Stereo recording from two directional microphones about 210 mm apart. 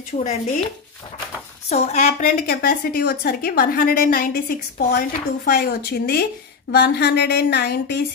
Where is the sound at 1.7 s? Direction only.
30° left (ahead or behind); by 8.0 s 50° left (ahead or behind).